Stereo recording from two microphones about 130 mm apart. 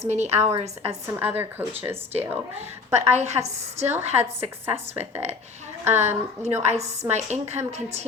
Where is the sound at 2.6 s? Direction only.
60° right (ahead or behind).